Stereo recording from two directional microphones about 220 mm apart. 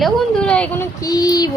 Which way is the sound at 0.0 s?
5° left (ahead or behind).